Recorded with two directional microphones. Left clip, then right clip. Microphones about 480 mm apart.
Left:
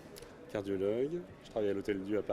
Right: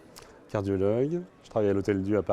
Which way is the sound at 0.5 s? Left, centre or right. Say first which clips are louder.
Right 7 dB; right.